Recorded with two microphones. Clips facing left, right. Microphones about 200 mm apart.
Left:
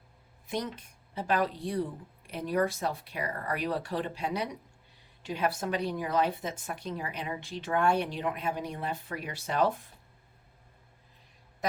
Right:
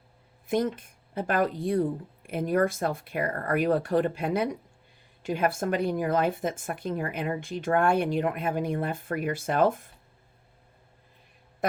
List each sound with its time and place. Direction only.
0.4 s a woman's voice: 50° right (ahead or behind)